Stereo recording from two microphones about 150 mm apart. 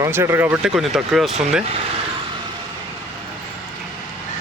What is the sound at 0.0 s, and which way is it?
Speech, 15° right (ahead or behind).